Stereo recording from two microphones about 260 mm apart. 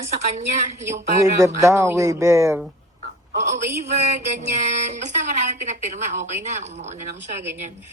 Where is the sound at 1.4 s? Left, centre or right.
Centre.